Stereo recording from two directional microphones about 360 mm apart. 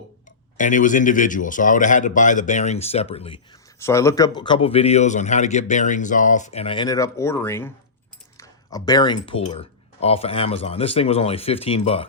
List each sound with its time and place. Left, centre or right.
0.5 s speech: left